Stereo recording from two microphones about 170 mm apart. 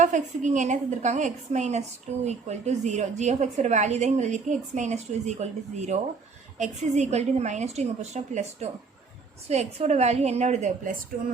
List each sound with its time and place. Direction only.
0.0 s a woman's voice: 45° right (ahead or behind)